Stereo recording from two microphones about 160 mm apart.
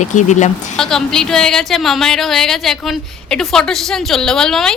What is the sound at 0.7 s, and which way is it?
Speech, centre (ahead or behind).